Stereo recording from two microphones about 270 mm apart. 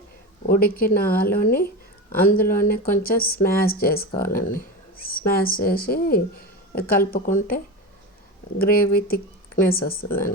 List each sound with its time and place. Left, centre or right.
0.4 s speech: left